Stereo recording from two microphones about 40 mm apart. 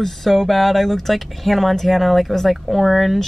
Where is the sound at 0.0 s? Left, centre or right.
Centre.